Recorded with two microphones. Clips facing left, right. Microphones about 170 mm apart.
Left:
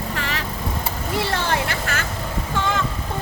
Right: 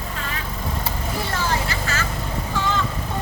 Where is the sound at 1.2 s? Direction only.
70° left (ahead or behind).